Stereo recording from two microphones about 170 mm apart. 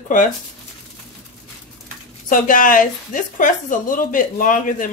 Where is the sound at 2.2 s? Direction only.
50° left (ahead or behind).